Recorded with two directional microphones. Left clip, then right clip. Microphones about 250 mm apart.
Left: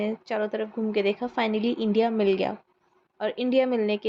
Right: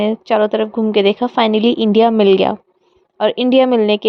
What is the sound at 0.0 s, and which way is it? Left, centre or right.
A woman's voice, right.